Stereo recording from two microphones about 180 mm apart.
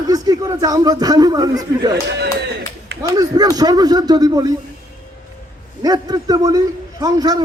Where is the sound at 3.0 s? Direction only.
20° right (ahead or behind).